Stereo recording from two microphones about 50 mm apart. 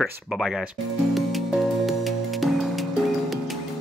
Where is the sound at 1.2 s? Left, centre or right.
Centre.